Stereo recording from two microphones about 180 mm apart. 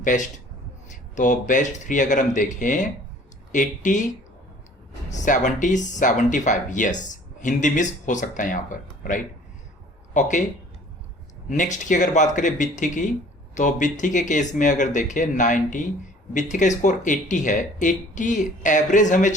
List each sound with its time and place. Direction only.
0.0 s a man's voice: 45° left (ahead or behind)
11.4 s speech: 45° left (ahead or behind)